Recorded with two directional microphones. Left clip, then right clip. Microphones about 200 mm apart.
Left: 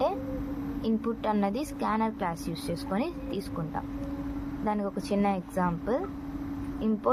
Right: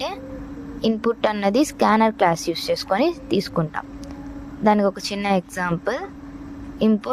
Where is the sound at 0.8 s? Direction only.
40° right (ahead or behind).